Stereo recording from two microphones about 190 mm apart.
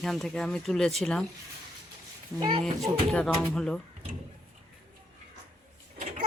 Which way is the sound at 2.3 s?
20° right (ahead or behind).